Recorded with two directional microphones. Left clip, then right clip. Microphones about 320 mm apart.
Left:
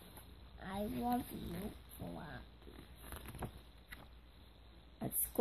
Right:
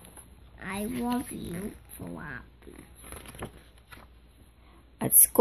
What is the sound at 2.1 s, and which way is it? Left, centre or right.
Duck, right.